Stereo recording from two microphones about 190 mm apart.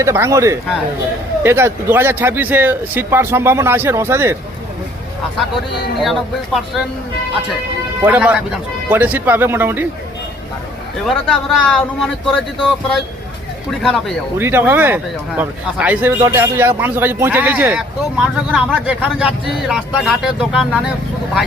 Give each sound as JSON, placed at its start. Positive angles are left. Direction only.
{"t": 0.0, "sound": "speech", "side_deg": -15}
{"t": 6.0, "sound": "speech", "side_deg": 0}
{"t": 8.0, "sound": "speech", "side_deg": -10}
{"t": 11.0, "sound": "speech", "side_deg": 0}
{"t": 13.7, "sound": "speech", "side_deg": 0}
{"t": 14.3, "sound": "speech", "side_deg": -10}